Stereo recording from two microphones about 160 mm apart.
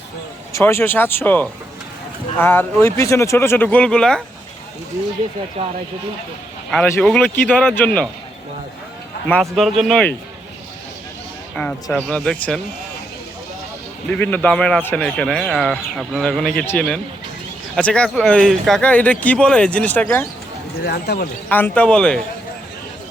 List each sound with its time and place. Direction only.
0.5 s speech: 15° left (ahead or behind)
5.6 s speech: 35° right (ahead or behind)
7.0 s speech: 5° left (ahead or behind)
9.2 s speech: 10° left (ahead or behind)
11.5 s speech: 5° left (ahead or behind)
14.1 s speech: 10° left (ahead or behind)
20.8 s speech: 85° left
21.5 s speech: 10° left (ahead or behind)